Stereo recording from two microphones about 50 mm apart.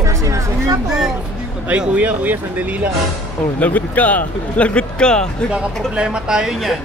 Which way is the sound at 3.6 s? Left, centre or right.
Left.